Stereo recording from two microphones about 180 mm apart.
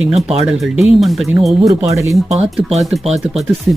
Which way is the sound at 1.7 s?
20° right (ahead or behind).